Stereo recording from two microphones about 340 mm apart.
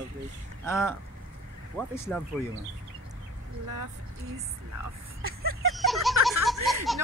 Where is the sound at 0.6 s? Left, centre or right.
Centre.